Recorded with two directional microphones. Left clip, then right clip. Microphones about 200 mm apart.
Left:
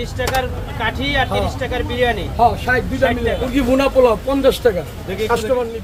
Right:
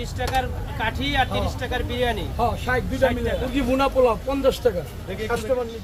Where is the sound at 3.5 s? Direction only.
15° left (ahead or behind).